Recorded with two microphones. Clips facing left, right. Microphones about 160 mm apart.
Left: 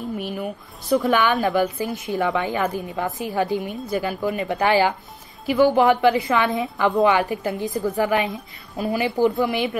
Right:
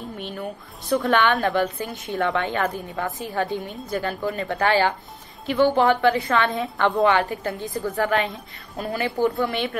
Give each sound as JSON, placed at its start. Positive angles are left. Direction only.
{"t": 0.2, "sound": "a woman's voice", "side_deg": 10}
{"t": 3.5, "sound": "a woman's voice", "side_deg": 0}
{"t": 4.2, "sound": "a woman's voice", "side_deg": 15}
{"t": 6.8, "sound": "a woman's voice", "side_deg": 10}
{"t": 8.3, "sound": "a woman's voice", "side_deg": 0}